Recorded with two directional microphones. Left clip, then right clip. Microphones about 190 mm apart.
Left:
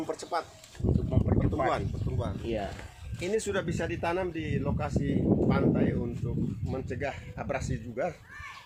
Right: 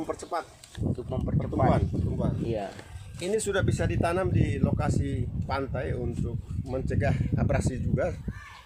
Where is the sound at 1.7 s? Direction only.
20° right (ahead or behind).